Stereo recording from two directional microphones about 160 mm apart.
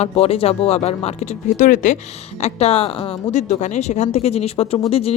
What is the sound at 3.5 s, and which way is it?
Speech, 50° left (ahead or behind).